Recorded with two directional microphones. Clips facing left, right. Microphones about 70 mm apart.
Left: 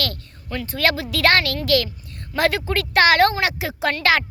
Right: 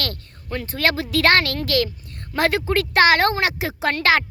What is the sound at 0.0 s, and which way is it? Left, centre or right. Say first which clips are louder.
Speech: left 2 dB; right.